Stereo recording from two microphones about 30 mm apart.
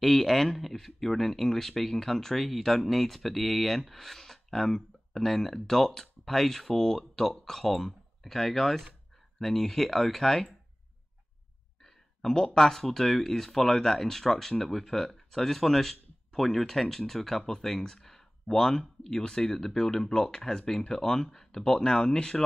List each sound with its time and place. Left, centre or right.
0.0 s speech: centre
11.8 s a sound: centre
12.5 s speech: centre